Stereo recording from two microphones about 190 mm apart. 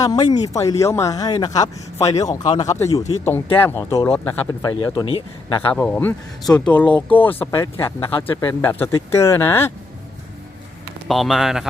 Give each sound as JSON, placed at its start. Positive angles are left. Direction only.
{"t": 0.0, "sound": "speech", "side_deg": 20}
{"t": 4.7, "sound": "speech", "side_deg": 25}
{"t": 5.5, "sound": "speech", "side_deg": 5}
{"t": 11.1, "sound": "speech", "side_deg": 0}